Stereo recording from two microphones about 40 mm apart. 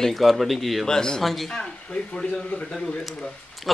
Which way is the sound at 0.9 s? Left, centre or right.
Centre.